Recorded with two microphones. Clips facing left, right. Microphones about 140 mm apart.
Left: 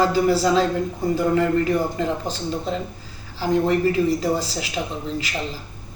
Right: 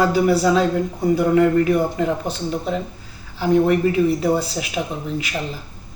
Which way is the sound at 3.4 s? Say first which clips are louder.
Right 3 dB; 10° right (ahead or behind).